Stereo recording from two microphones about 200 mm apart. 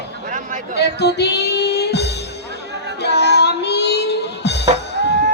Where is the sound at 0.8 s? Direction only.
55° left (ahead or behind).